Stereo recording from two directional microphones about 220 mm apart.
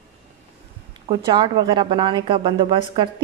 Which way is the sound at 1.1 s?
20° right (ahead or behind).